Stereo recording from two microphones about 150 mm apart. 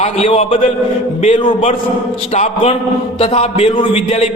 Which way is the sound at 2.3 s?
45° left (ahead or behind).